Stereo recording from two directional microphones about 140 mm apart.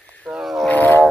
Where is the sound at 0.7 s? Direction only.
15° left (ahead or behind).